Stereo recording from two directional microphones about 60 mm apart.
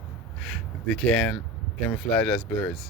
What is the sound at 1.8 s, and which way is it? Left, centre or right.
Speech, centre.